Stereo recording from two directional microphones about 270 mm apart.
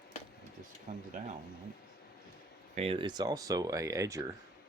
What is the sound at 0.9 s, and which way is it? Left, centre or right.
Speech, right.